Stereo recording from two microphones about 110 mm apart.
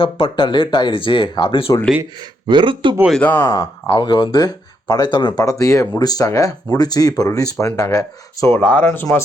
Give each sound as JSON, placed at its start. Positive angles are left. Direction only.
{"t": 0.0, "sound": "speech", "side_deg": 50}
{"t": 2.5, "sound": "speech", "side_deg": -45}
{"t": 3.1, "sound": "speech", "side_deg": 15}
{"t": 3.4, "sound": "speech", "side_deg": 35}